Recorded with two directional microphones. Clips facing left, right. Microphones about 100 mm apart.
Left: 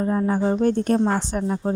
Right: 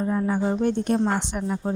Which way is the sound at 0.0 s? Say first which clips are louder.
Left 2 dB; 35° left (ahead or behind).